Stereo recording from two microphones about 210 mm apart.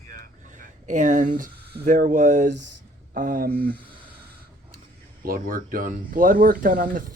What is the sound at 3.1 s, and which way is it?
Speech, 40° right (ahead or behind).